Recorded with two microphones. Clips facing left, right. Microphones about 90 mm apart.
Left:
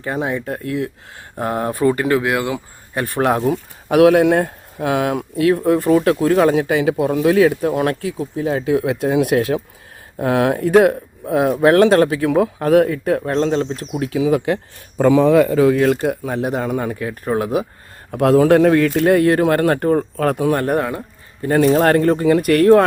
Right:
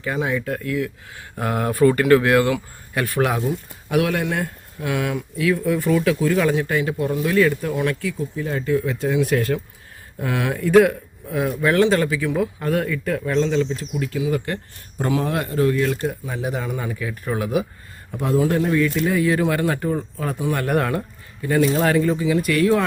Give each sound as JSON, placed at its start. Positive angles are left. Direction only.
{"t": 0.0, "sound": "speech", "side_deg": 30}
{"t": 2.9, "sound": "speech", "side_deg": 30}
{"t": 3.2, "sound": "speech", "side_deg": 45}
{"t": 3.5, "sound": "speech", "side_deg": 70}
{"t": 15.6, "sound": "speech", "side_deg": 70}
{"t": 18.1, "sound": "speech", "side_deg": 75}
{"t": 20.5, "sound": "speech", "side_deg": 40}
{"t": 20.7, "sound": "speech", "side_deg": 15}
{"t": 21.4, "sound": "speech", "side_deg": 45}